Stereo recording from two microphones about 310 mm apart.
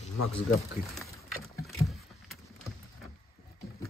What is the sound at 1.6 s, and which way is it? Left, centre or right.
Rowboat, centre.